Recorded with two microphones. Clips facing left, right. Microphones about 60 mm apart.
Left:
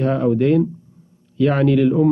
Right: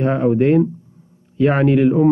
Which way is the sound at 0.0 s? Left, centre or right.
Right.